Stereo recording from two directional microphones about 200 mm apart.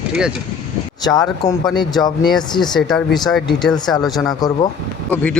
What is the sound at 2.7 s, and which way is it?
Speech, centre (ahead or behind).